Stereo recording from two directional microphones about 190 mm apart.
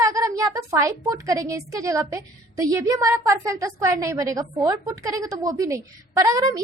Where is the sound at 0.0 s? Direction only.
15° right (ahead or behind).